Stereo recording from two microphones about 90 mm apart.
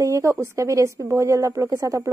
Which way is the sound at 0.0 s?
30° right (ahead or behind).